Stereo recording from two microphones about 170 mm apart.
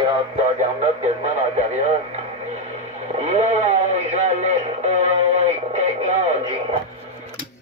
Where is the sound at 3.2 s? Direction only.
40° right (ahead or behind).